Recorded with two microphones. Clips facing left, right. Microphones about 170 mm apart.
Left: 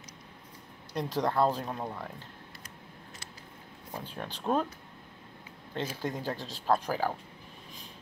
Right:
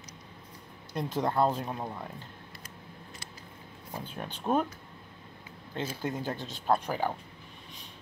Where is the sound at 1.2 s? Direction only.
5° right (ahead or behind).